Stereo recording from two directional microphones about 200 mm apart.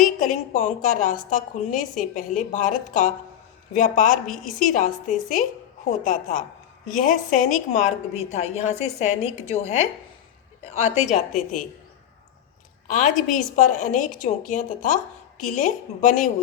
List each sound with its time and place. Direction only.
0.0 s a woman's voice: 40° left (ahead or behind)
12.9 s a woman's voice: 40° left (ahead or behind)